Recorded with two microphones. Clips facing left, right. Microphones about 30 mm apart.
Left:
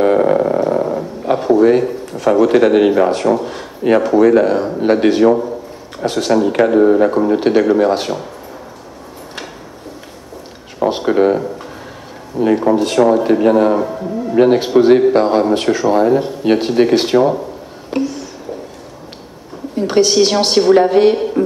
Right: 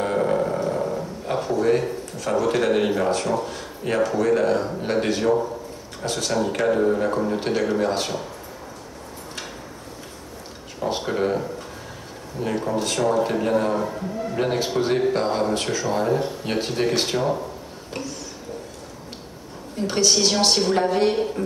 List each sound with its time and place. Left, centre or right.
0.0 s a sound: left
2.1 s a man's voice: left
11.0 s a man's voice: left
17.9 s a sound: left
19.9 s a man's voice: left
21.1 s speech: centre